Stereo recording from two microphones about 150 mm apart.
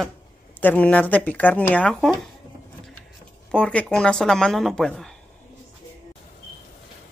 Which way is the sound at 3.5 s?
10° left (ahead or behind).